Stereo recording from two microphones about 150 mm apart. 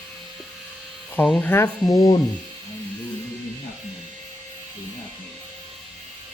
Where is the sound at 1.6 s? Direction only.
25° left (ahead or behind).